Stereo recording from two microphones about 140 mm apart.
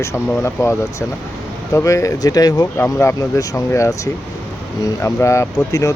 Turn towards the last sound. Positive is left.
turn(degrees=20)  # may be behind; listen again after turning